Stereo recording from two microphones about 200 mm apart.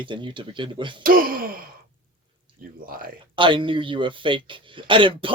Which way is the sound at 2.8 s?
45° right (ahead or behind).